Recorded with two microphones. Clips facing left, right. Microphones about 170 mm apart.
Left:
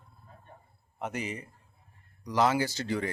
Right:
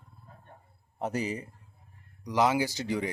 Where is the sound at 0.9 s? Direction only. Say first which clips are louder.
Right 4 dB; 35° right (ahead or behind).